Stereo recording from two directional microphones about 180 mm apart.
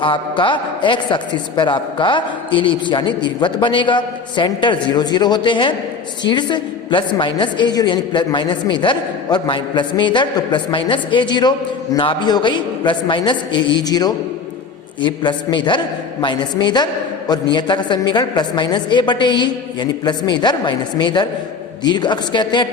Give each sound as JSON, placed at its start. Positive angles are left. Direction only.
{"t": 0.0, "sound": "a man's voice", "side_deg": 25}